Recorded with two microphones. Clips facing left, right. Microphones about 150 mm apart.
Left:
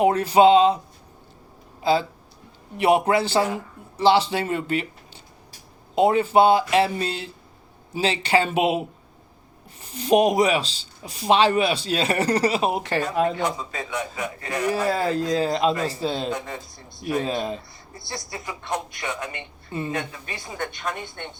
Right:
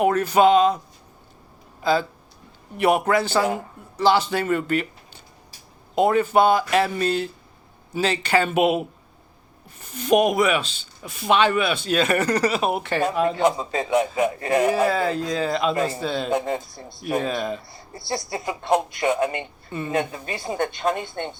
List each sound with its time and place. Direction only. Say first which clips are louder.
0.0 s speech: left 1 dB; 30° left (ahead or behind)
1.8 s speech: even; 30° left (ahead or behind)
9.8 s speech: even; 35° left (ahead or behind)
13.6 s a woman's voice: right 8 dB; 30° right (ahead or behind)
14.7 s speech: right 2 dB; 40° left (ahead or behind)
16.3 s speech: right 7 dB; 25° right (ahead or behind)
17.2 s speech: right 1 dB; 30° left (ahead or behind)
18.1 s a woman's voice: right 7 dB; 30° right (ahead or behind)